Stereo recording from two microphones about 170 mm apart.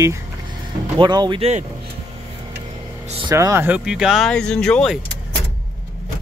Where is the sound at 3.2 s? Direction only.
20° right (ahead or behind); by 5.0 s 5° left (ahead or behind).